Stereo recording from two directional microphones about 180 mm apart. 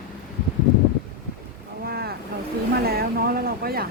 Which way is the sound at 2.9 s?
60° right (ahead or behind).